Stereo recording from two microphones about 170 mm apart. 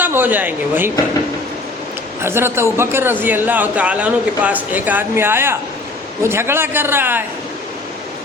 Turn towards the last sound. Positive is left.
turn(degrees=-10)  # may be behind; listen again after turning